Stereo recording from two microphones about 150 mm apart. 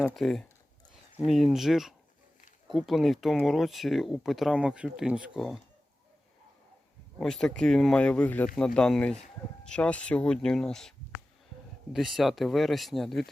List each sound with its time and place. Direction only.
0.0 s speech: centre (ahead or behind)
7.2 s speech: 5° left (ahead or behind)
11.9 s speech: centre (ahead or behind)